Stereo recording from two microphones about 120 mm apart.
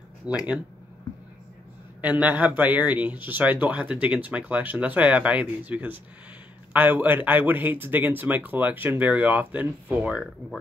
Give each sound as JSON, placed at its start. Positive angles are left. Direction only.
{"t": 0.3, "sound": "speech", "side_deg": -10}
{"t": 2.0, "sound": "speech", "side_deg": -15}